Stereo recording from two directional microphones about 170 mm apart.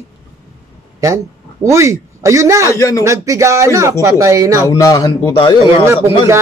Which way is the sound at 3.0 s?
20° right (ahead or behind).